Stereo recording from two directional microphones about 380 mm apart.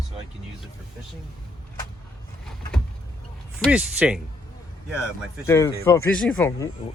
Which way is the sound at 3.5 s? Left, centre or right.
Centre.